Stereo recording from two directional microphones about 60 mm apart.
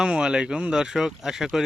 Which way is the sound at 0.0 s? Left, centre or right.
Centre.